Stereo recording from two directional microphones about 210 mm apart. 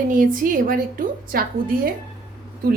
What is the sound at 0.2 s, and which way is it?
A woman's voice, 40° right (ahead or behind).